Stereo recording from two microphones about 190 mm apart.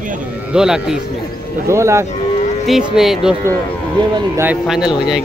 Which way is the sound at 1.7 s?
15° right (ahead or behind).